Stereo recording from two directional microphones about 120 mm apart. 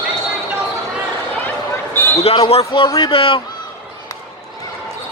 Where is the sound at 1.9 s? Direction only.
20° left (ahead or behind).